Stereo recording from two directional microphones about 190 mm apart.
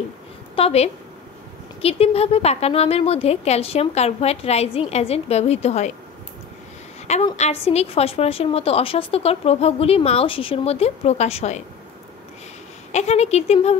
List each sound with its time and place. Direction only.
0.6 s a woman's voice: 30° left (ahead or behind)
7.3 s a woman's voice: 35° left (ahead or behind)
12.9 s a woman's voice: 35° left (ahead or behind)